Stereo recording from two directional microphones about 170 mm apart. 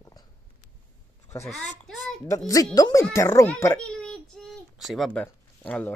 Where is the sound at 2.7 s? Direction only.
20° left (ahead or behind).